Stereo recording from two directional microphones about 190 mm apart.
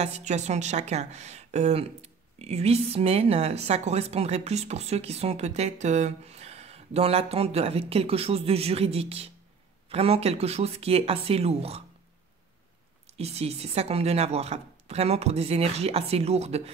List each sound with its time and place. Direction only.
0.0 s a woman's voice: 35° right (ahead or behind)
13.2 s a woman's voice: 35° right (ahead or behind)